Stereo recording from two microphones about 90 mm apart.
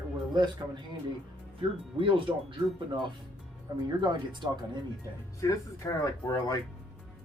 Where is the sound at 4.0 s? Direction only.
60° right (ahead or behind).